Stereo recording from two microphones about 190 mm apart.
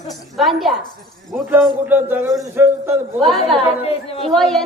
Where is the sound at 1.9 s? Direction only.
10° right (ahead or behind).